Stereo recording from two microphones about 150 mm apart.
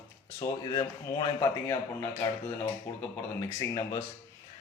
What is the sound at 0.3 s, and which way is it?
A man's voice, 25° left (ahead or behind).